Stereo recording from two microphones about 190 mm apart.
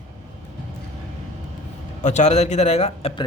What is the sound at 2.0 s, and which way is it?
A man's voice, 40° left (ahead or behind).